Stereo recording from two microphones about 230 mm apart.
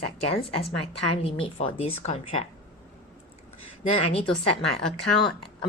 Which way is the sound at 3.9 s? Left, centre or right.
Left.